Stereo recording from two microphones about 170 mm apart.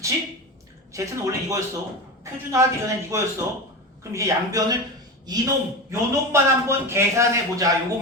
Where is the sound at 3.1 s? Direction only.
20° right (ahead or behind).